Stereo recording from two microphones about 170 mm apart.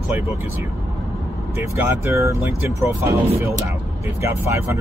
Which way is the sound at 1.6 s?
15° right (ahead or behind).